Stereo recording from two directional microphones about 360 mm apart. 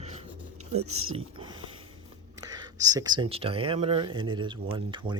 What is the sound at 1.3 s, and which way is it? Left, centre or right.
Speech, centre.